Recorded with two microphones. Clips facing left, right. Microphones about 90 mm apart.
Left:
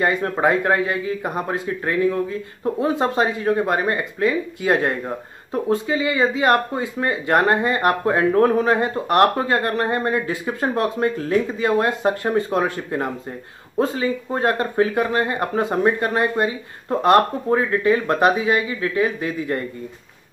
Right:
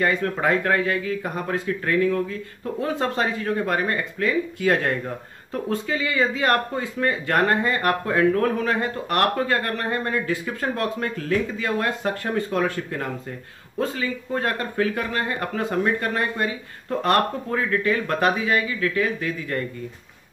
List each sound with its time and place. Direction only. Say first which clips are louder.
0.0 s speech: left 3 dB; 20° left (ahead or behind)